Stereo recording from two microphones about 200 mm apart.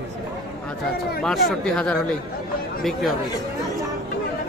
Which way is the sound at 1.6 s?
5° left (ahead or behind).